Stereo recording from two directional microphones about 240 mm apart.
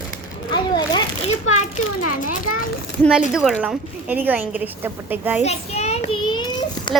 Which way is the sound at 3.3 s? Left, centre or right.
Centre.